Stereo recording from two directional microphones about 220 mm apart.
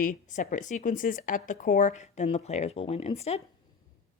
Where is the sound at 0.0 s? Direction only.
35° left (ahead or behind).